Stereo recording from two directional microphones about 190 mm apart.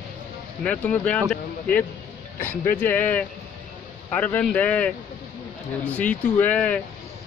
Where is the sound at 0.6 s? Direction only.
10° left (ahead or behind).